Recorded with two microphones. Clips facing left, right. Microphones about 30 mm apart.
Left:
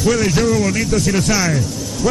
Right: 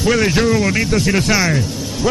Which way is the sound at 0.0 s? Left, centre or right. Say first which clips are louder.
Right 1 dB; right.